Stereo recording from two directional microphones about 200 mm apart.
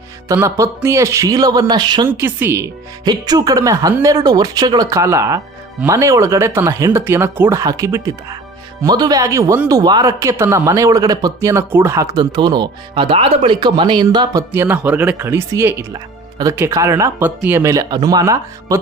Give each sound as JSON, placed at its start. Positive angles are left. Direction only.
{"t": 0.3, "sound": "speech", "side_deg": -15}
{"t": 2.0, "sound": "speech", "side_deg": -10}
{"t": 14.5, "sound": "speech", "side_deg": -10}